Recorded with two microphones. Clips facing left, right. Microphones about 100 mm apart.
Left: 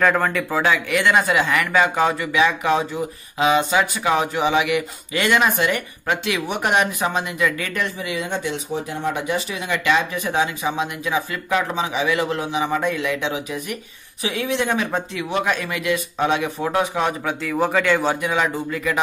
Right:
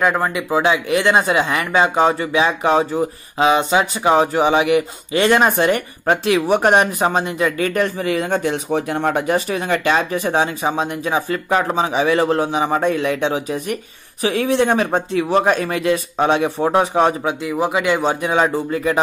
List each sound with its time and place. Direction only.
0.0 s speech: 15° right (ahead or behind); by 8.7 s 50° right (ahead or behind)
8.7 s speech: 65° right (ahead or behind); by 17.3 s 30° right (ahead or behind)
17.3 s speech: 20° right (ahead or behind)
18.3 s speech: 35° right (ahead or behind)